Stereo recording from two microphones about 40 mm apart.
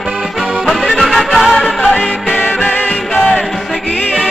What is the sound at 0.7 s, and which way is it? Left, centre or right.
Music, centre.